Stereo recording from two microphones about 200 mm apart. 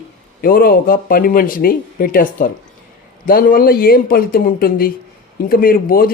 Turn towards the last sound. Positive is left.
turn(degrees=45)  # may be behind; listen again after turning